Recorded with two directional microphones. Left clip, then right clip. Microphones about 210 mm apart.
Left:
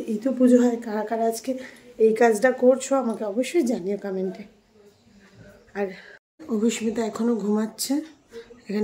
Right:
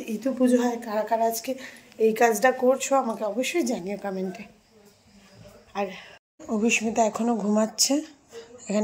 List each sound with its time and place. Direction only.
0.0 s a woman's voice: 25° left (ahead or behind)
5.7 s speech: 20° left (ahead or behind)
6.6 s speech: centre (ahead or behind)